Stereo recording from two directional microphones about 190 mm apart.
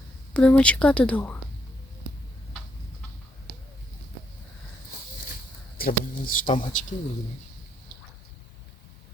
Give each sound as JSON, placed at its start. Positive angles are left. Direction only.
{"t": 0.3, "sound": "speech", "side_deg": 5}
{"t": 5.7, "sound": "speech", "side_deg": 50}